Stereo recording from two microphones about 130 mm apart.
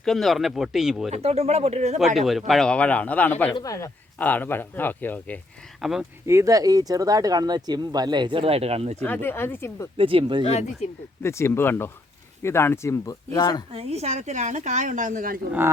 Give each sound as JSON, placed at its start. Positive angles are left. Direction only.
{"t": 0.0, "sound": "speech", "side_deg": 0}
{"t": 1.1, "sound": "speech", "side_deg": -55}
{"t": 2.1, "sound": "speech", "side_deg": 0}
{"t": 3.5, "sound": "speech", "side_deg": 25}
{"t": 4.2, "sound": "speech", "side_deg": 15}
{"t": 5.8, "sound": "speech", "side_deg": -5}
{"t": 6.2, "sound": "speech", "side_deg": -25}
{"t": 9.0, "sound": "speech", "side_deg": 15}
{"t": 10.0, "sound": "speech", "side_deg": -45}
{"t": 10.4, "sound": "speech", "side_deg": 55}
{"t": 11.2, "sound": "speech", "side_deg": 20}
{"t": 13.7, "sound": "a woman's voice", "side_deg": -55}